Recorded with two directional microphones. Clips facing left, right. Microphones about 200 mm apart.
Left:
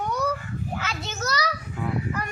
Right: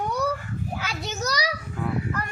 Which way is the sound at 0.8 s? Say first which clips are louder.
Right 1 dB; 15° right (ahead or behind).